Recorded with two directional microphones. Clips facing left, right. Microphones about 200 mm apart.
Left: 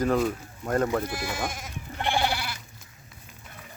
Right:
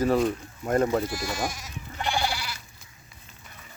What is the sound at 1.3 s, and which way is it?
Speech, 55° left (ahead or behind).